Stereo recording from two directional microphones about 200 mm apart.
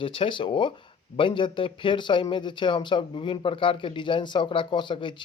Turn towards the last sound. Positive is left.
turn(degrees=25)  # may be behind; listen again after turning